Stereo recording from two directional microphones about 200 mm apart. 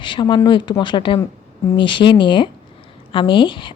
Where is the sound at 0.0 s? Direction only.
25° left (ahead or behind).